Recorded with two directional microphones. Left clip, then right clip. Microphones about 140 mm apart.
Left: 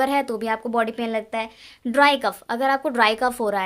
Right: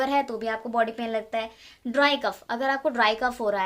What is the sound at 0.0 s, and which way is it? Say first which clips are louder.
Speech: left 3 dB; 45° left (ahead or behind).